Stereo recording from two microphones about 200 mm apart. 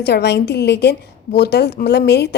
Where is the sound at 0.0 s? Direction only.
55° left (ahead or behind).